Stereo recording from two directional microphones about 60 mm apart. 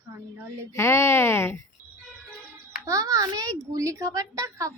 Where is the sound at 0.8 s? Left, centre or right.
Left.